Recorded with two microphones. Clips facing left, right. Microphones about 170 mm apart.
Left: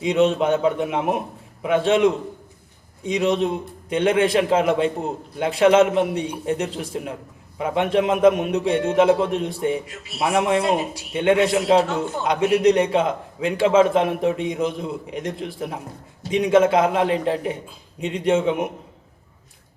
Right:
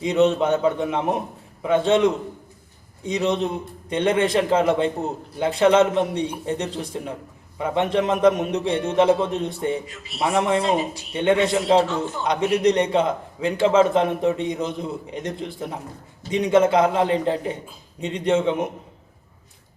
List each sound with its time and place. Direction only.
0.0 s a man's voice: 5° left (ahead or behind)
3.2 s a man's voice: 5° left (ahead or behind)